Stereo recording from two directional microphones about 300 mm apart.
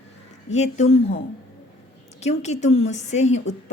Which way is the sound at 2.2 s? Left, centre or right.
Left.